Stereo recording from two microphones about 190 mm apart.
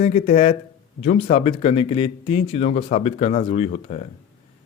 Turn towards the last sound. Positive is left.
turn(degrees=35)  # may be behind; listen again after turning